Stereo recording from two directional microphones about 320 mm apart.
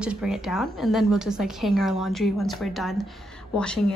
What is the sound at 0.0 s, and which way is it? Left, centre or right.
A woman's voice, centre.